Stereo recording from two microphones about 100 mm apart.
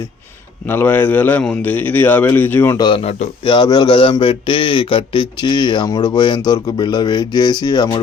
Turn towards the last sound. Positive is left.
turn(degrees=45)  # may be behind; listen again after turning